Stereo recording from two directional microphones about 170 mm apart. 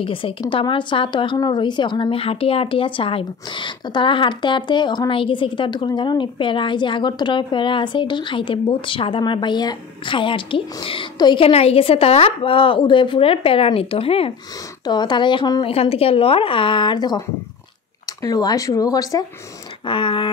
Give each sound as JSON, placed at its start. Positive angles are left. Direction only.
{"t": 0.0, "sound": "a woman's voice", "side_deg": 30}